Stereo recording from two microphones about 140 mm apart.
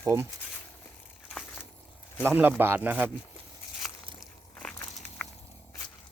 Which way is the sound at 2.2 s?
15° right (ahead or behind).